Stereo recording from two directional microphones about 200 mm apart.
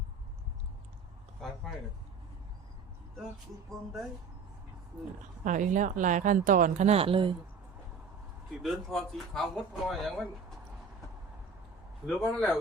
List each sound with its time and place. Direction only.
5.5 s speech: 40° right (ahead or behind)
8.6 s speech: centre (ahead or behind)
12.0 s speech: centre (ahead or behind)